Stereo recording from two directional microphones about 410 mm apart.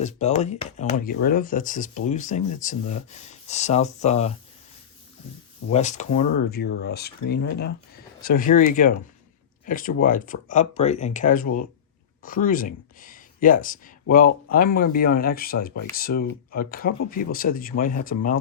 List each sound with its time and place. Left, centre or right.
0.0 s speech: centre
5.7 s speech: centre
9.6 s speech: centre
11.4 s speech: left
12.2 s speech: centre